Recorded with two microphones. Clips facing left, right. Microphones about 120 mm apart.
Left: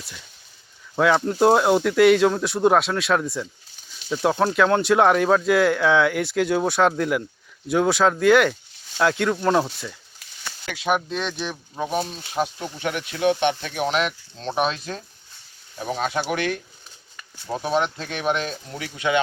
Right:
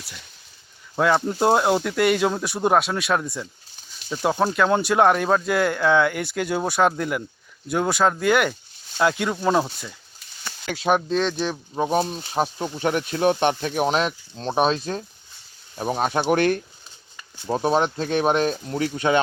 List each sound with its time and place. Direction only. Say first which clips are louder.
0.9 s speech: left 1 dB; 5° right (ahead or behind)
10.7 s speech: right 3 dB; 35° right (ahead or behind)